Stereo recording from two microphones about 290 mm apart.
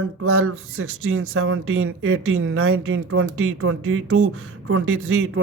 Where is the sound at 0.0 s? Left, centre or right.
Right.